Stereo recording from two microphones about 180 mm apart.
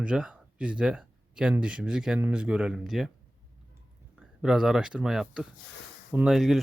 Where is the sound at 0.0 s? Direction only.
5° right (ahead or behind).